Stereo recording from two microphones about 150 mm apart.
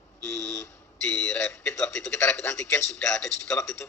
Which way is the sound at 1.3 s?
15° left (ahead or behind).